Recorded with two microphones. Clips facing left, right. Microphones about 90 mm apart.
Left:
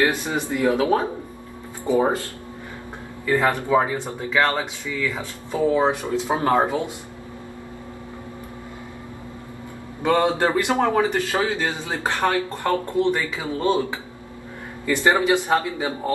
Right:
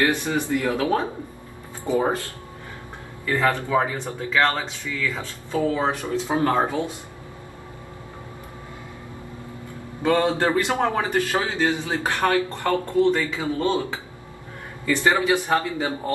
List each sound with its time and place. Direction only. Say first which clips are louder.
0.0 s speech: even; 20° left (ahead or behind)
3.3 s speech: left 2 dB; 20° left (ahead or behind)
10.0 s speech: left 1 dB; 20° left (ahead or behind)